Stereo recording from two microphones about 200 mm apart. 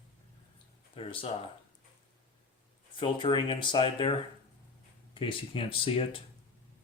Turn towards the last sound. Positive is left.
turn(degrees=25)  # may be behind; listen again after turning